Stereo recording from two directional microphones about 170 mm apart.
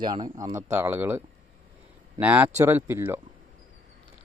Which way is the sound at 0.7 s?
15° right (ahead or behind).